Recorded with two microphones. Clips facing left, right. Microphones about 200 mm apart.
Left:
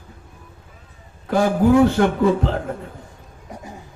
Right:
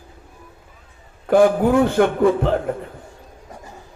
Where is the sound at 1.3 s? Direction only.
55° right (ahead or behind).